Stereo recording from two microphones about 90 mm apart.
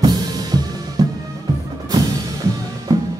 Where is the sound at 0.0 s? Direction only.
45° right (ahead or behind).